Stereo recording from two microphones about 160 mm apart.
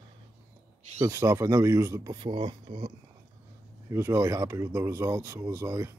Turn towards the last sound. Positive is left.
turn(degrees=-20)  # may be behind; listen again after turning